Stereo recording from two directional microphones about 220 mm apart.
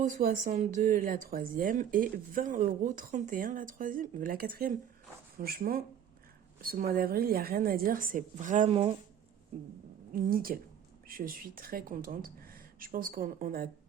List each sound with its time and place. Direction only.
0.0 s speech: 40° right (ahead or behind)
10.1 s speech: 40° right (ahead or behind)